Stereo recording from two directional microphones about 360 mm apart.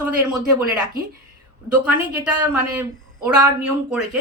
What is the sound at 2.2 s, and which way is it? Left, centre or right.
A woman's voice, centre.